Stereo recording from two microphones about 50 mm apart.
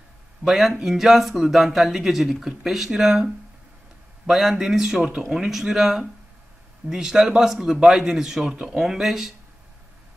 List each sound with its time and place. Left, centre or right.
0.5 s speech: centre